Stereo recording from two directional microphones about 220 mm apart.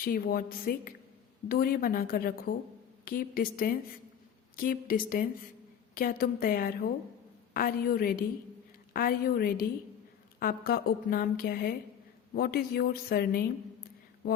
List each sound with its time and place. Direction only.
0.0 s a woman's voice: 40° left (ahead or behind)